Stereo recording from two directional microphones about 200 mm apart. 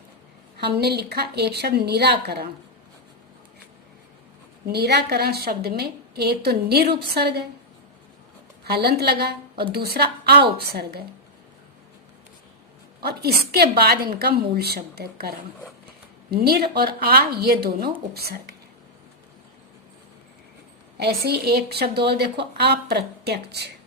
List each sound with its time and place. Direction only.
0.6 s a woman's voice: 55° right (ahead or behind)
4.6 s a woman's voice: 55° right (ahead or behind)
8.6 s a woman's voice: 55° right (ahead or behind)
13.0 s a woman's voice: 50° right (ahead or behind)
16.3 s a woman's voice: 50° right (ahead or behind)
21.0 s a woman's voice: 55° right (ahead or behind)